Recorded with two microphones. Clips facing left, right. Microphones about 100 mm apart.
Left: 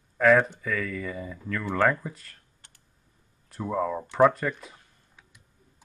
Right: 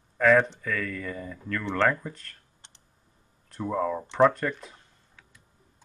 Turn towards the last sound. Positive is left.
turn(degrees=5)  # may be behind; listen again after turning